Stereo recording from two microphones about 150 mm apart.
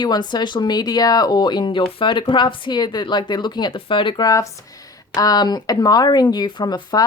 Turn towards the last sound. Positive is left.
turn(degrees=25)  # may be behind; listen again after turning